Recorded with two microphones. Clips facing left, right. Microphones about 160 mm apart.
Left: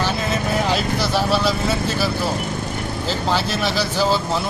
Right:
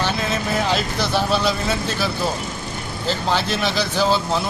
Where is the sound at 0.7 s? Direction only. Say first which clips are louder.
Left 1 dB; 5° left (ahead or behind).